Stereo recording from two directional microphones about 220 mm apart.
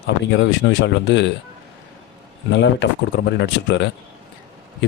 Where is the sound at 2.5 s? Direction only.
55° left (ahead or behind).